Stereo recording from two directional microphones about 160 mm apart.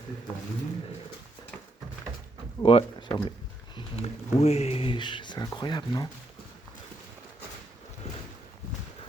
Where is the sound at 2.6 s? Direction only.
35° left (ahead or behind).